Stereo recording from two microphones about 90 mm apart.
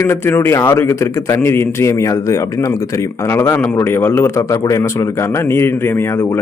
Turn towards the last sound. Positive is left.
turn(degrees=30)  # may be behind; listen again after turning